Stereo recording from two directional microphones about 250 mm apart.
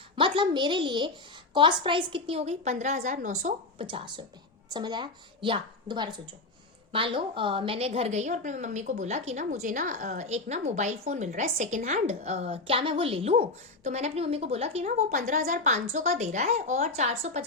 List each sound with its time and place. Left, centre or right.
0.2 s a woman's voice: centre
3.8 s a woman's voice: centre